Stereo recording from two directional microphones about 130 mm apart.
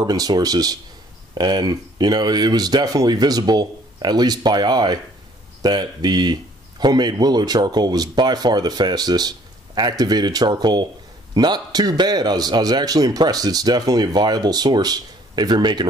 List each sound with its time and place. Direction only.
0.0 s a man's voice: 30° right (ahead or behind)